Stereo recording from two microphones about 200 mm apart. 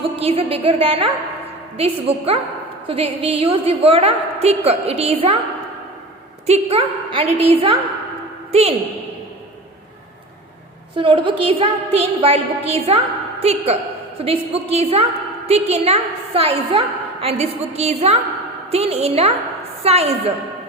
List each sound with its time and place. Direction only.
0.0 s a woman's voice: 30° right (ahead or behind)
6.5 s a woman's voice: 30° right (ahead or behind)
10.9 s a woman's voice: 25° right (ahead or behind)